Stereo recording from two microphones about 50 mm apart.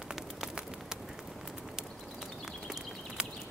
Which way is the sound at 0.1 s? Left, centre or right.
Centre.